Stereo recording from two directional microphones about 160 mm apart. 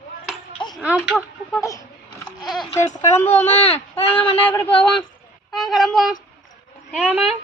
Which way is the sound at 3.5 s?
40° left (ahead or behind).